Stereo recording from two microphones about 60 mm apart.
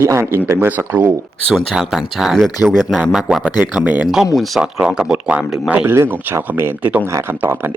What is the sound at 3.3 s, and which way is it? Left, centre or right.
Speech, centre.